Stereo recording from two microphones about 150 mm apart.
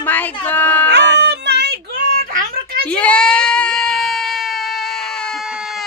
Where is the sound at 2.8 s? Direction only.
10° left (ahead or behind).